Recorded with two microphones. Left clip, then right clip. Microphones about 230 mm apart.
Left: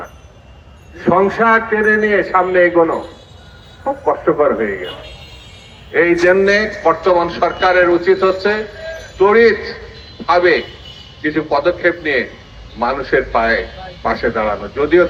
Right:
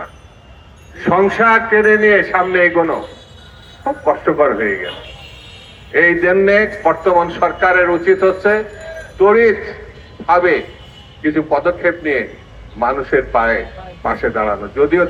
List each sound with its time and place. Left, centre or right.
1.0 s a man's voice: right
4.3 s a man's voice: right
5.9 s a man's voice: right